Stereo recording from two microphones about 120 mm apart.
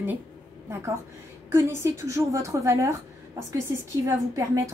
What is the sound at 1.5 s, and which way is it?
A woman's voice, 20° right (ahead or behind).